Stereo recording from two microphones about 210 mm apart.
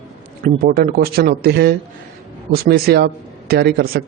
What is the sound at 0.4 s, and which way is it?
A man's voice, 45° right (ahead or behind).